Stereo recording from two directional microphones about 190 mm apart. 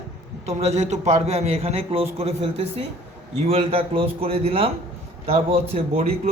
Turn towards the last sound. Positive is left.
turn(degrees=-30)  # may be behind; listen again after turning